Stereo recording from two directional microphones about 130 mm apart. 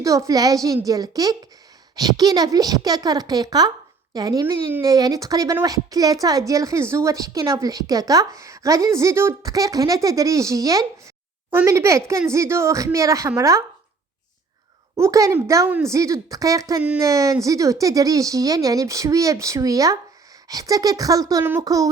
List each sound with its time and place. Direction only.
0.0 s a woman's voice: 25° right (ahead or behind)
14.9 s a woman's voice: 25° right (ahead or behind)